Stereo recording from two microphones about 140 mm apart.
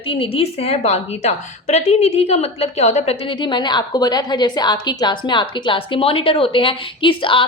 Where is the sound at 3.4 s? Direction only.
30° left (ahead or behind).